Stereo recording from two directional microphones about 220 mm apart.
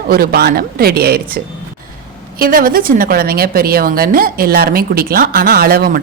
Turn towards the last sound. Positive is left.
turn(degrees=-40)  # may be behind; listen again after turning